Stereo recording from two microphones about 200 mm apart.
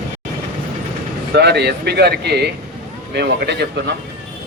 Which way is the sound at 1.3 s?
55° right (ahead or behind).